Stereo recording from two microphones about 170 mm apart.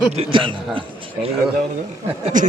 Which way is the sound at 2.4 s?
50° right (ahead or behind).